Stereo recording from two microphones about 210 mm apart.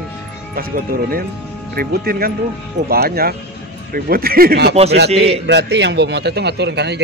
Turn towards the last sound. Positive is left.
turn(degrees=-55)  # may be behind; listen again after turning